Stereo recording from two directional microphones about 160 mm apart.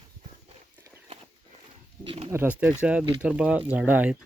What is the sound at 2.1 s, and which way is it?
Speech, 40° right (ahead or behind).